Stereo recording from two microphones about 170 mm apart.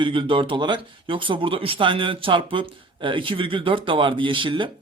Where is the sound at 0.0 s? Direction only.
30° right (ahead or behind).